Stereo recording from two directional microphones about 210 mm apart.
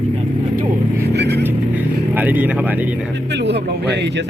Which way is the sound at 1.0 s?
50° right (ahead or behind).